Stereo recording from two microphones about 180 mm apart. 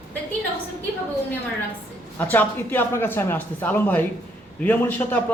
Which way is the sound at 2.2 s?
10° left (ahead or behind).